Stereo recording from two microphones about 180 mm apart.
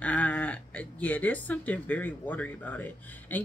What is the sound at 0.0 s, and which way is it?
Speech, 10° left (ahead or behind).